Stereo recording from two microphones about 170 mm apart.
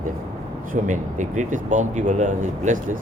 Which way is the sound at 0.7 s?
50° right (ahead or behind).